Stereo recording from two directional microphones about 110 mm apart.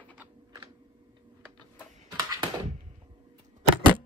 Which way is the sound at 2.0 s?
35° right (ahead or behind).